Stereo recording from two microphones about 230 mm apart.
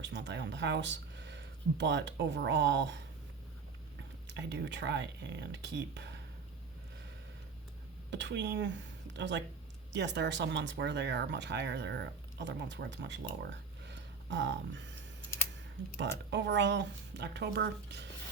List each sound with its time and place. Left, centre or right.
0.0 s speech: right
4.3 s speech: right
8.1 s speech: right
13.4 s a sound: right
16.0 s speech: right